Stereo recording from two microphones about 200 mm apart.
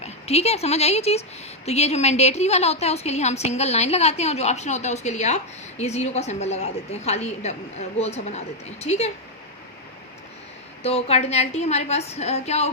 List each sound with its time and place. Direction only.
0.0 s a woman's voice: 30° left (ahead or behind)
10.8 s a woman's voice: 30° left (ahead or behind)